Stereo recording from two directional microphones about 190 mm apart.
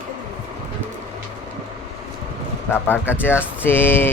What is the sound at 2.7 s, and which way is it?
A man's voice, 10° left (ahead or behind).